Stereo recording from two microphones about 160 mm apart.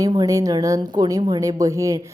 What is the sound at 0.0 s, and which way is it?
A woman's voice, 25° right (ahead or behind).